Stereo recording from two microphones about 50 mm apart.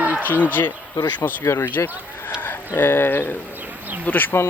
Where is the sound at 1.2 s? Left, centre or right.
Left.